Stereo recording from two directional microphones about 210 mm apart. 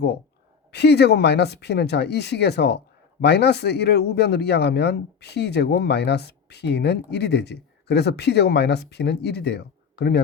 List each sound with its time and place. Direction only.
0.7 s speech: 50° left (ahead or behind)